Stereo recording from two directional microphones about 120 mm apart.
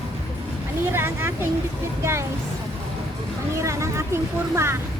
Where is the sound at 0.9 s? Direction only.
20° right (ahead or behind).